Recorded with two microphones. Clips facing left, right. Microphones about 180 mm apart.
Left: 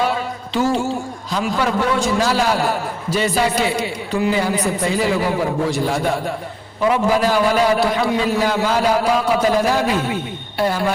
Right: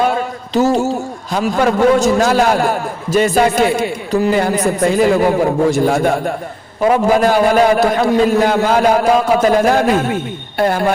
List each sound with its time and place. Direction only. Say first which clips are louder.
0.0 s a man's voice: right 4 dB; 45° right (ahead or behind)